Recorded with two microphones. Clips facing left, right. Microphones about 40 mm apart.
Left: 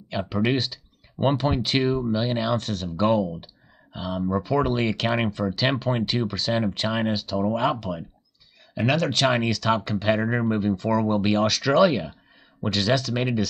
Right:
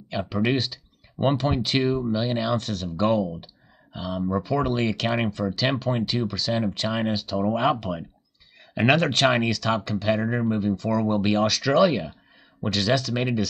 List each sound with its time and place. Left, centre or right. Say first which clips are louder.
0.1 s speech: even; centre
8.7 s speech: right 3 dB; right
9.0 s speech: right 1 dB; centre
9.8 s speech: left 1 dB; centre
10.5 s speech: left 1 dB; left
11.0 s speech: right 1 dB; centre